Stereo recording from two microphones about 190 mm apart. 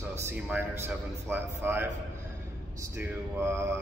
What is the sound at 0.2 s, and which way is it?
Speech, 10° right (ahead or behind).